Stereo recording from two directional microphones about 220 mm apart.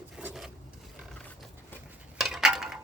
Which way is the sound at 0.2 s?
5° right (ahead or behind).